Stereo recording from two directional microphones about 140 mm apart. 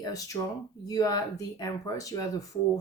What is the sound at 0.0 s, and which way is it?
Speech, 25° left (ahead or behind).